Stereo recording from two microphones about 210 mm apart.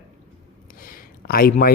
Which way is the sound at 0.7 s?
45° left (ahead or behind).